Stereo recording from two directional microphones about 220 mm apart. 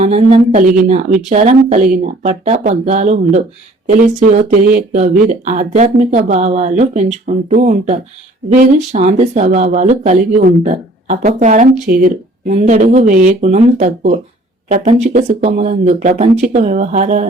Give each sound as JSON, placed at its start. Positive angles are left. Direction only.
{"t": 0.0, "sound": "speech", "side_deg": -30}